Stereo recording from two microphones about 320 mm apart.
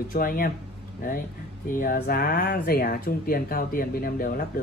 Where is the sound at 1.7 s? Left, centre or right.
Left.